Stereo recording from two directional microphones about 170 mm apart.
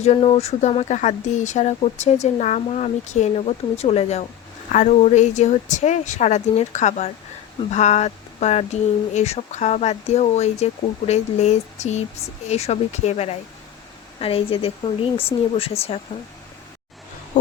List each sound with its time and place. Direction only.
0.0 s speech: 40° left (ahead or behind)